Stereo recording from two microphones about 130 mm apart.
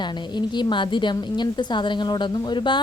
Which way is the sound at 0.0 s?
35° left (ahead or behind).